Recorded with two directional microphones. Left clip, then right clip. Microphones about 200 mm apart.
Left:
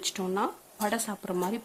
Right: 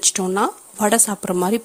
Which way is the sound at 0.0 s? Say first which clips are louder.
Right 11 dB; 35° right (ahead or behind).